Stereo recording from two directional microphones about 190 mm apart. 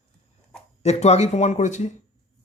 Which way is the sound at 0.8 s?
35° left (ahead or behind).